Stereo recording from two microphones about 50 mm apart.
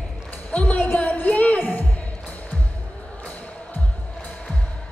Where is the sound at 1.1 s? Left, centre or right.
Left.